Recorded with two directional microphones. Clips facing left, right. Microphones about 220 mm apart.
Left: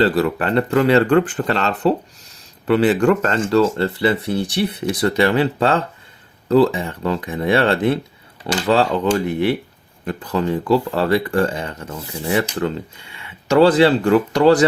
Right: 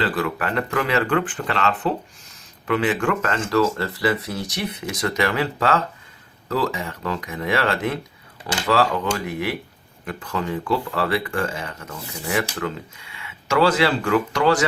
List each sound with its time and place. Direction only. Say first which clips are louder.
0.0 s speech: left 7 dB; 35° left (ahead or behind)